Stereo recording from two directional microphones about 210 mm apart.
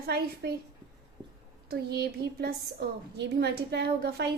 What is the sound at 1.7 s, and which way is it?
A woman's voice, 50° right (ahead or behind).